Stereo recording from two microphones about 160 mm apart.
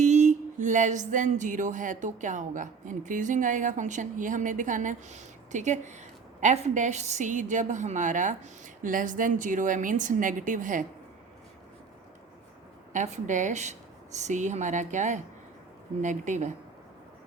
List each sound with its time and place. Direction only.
0.0 s music: 50° right (ahead or behind)
12.9 s music: 50° right (ahead or behind)